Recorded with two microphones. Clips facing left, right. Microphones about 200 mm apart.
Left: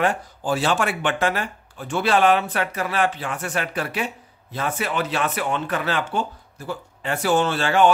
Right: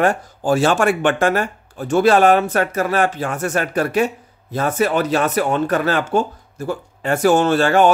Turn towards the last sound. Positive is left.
turn(degrees=-45)  # may be behind; listen again after turning